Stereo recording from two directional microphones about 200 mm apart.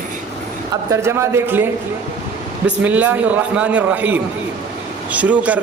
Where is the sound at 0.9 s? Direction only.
15° right (ahead or behind).